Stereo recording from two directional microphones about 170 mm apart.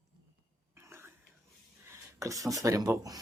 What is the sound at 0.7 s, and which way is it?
Whispering, 15° right (ahead or behind).